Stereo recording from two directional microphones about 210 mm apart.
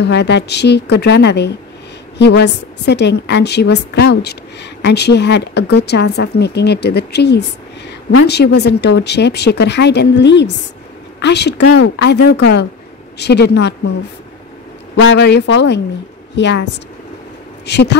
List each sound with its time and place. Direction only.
0.0 s a woman's voice: 55° left (ahead or behind)
15.0 s speech: 55° left (ahead or behind)
17.6 s speech: 55° left (ahead or behind)